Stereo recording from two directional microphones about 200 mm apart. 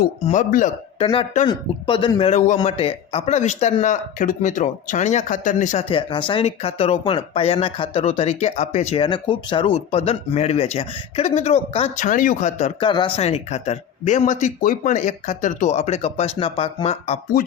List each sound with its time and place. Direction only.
0.0 s a man's voice: 40° left (ahead or behind)